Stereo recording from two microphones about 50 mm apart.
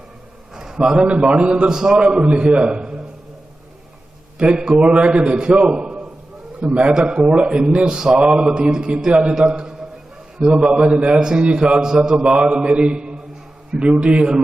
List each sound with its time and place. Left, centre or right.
0.5 s a sound: centre
0.8 s a man's voice: centre
4.4 s a man's voice: centre
10.4 s a man's voice: centre